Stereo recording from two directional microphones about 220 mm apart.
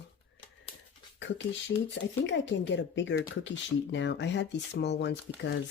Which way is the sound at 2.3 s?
55° left (ahead or behind).